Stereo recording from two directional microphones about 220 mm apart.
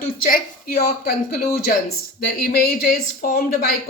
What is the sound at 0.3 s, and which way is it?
A man's voice, 40° left (ahead or behind).